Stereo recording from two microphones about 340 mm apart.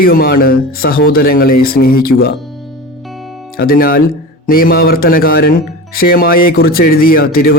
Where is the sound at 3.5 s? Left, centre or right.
Left.